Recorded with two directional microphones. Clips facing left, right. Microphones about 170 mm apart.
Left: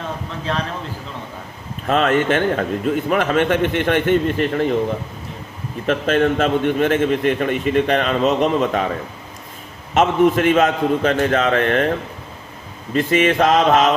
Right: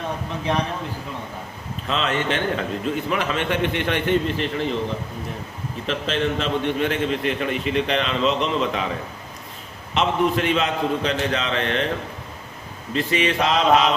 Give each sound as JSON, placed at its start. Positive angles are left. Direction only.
{"t": 0.5, "sound": "speech", "side_deg": -15}
{"t": 1.9, "sound": "a man's voice", "side_deg": 50}
{"t": 5.8, "sound": "a man's voice", "side_deg": 50}
{"t": 9.9, "sound": "a man's voice", "side_deg": 50}
{"t": 12.9, "sound": "a man's voice", "side_deg": 50}